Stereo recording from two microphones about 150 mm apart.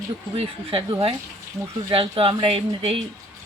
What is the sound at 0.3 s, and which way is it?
Speech, 35° right (ahead or behind).